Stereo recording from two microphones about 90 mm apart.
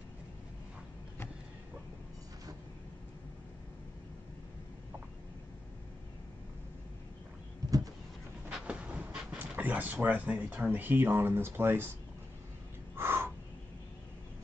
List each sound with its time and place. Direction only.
8.5 s train: 10° right (ahead or behind)
9.4 s speech: 20° right (ahead or behind)
12.9 s caw: 25° right (ahead or behind)